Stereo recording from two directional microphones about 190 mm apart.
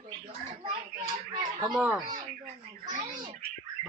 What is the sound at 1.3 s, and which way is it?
Speech, 20° right (ahead or behind).